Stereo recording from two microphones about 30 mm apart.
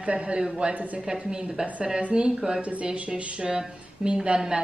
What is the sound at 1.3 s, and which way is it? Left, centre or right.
Speech, right.